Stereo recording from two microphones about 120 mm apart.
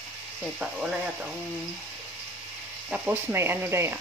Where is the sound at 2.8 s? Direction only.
10° right (ahead or behind).